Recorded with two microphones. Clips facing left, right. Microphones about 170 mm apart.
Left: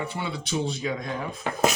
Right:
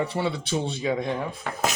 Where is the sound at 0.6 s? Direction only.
25° right (ahead or behind).